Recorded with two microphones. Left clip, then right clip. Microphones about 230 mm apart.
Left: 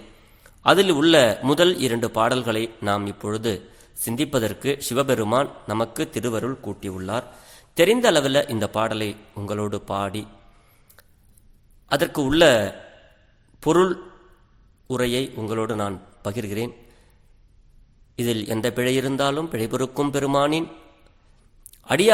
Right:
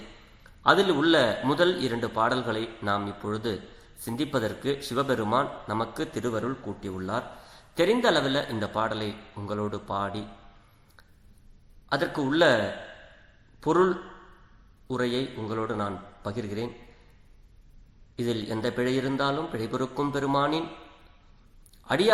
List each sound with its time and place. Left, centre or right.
0.7 s a man's voice: left
11.9 s a man's voice: left
13.7 s a man's voice: left
18.2 s a man's voice: left